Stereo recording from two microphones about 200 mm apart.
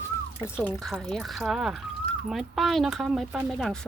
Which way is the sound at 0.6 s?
5° left (ahead or behind).